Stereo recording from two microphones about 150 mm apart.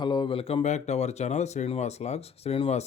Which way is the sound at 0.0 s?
30° left (ahead or behind).